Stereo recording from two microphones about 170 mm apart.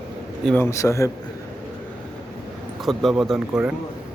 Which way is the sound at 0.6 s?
15° left (ahead or behind).